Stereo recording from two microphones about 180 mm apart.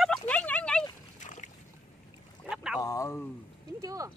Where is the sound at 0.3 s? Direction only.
10° left (ahead or behind).